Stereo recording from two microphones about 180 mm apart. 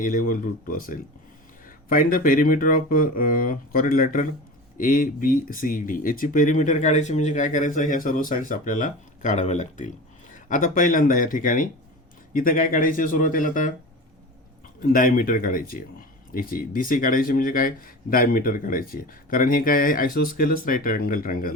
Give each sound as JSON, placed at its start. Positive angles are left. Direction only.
{"t": 0.0, "sound": "speech", "side_deg": 50}
{"t": 14.8, "sound": "speech", "side_deg": 50}